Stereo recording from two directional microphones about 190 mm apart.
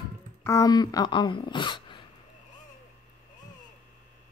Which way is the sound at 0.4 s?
15° left (ahead or behind).